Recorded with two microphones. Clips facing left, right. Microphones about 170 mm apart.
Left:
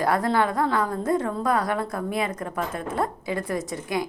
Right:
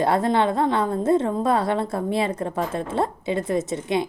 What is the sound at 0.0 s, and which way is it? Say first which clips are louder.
A woman's voice: right 2 dB; 25° right (ahead or behind).